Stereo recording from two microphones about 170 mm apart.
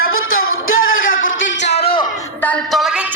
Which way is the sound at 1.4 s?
90° left.